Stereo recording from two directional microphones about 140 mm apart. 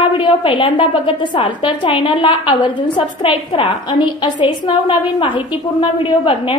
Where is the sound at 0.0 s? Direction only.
35° left (ahead or behind).